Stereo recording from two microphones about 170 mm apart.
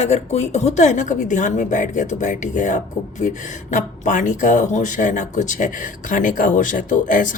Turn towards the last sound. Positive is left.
turn(degrees=50)  # may be behind; listen again after turning